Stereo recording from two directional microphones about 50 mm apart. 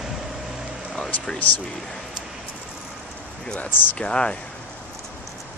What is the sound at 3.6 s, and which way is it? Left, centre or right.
Speech, left.